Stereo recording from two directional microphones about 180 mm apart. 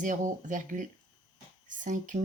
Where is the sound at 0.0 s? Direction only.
45° right (ahead or behind).